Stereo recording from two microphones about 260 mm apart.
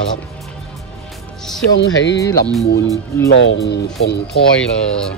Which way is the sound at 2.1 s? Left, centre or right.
Centre.